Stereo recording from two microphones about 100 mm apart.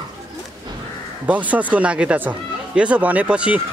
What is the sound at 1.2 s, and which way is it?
Speech, 15° right (ahead or behind).